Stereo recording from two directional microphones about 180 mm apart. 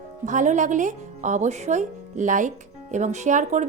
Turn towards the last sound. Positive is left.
turn(degrees=-40)  # may be behind; listen again after turning